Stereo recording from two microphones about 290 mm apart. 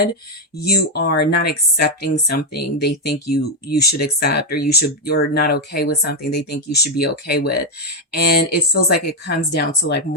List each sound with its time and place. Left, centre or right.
0.6 s speech: left